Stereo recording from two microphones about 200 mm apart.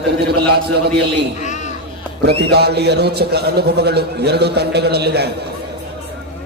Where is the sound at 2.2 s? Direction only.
55° right (ahead or behind).